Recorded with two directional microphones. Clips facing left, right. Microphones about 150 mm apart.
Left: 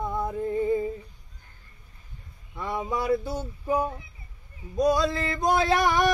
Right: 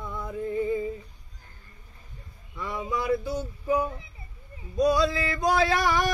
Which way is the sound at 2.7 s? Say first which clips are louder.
Left 1 dB; 45° left (ahead or behind).